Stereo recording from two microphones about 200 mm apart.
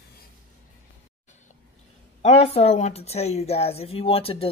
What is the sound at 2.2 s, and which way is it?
A woman's voice, 30° left (ahead or behind).